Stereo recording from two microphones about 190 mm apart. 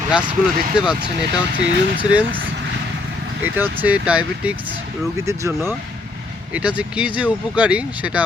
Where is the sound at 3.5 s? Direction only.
10° right (ahead or behind).